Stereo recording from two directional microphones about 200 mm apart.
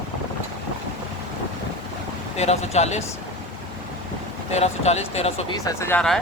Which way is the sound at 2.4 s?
35° left (ahead or behind).